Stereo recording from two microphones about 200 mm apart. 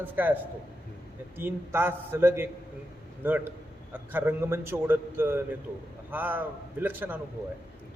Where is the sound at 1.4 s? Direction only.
10° right (ahead or behind).